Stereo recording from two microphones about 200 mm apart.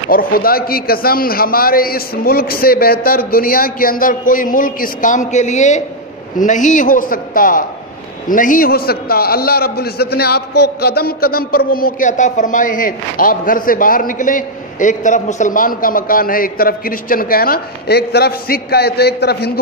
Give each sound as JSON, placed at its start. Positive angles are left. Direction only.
{"t": 0.1, "sound": "a man's voice", "side_deg": 45}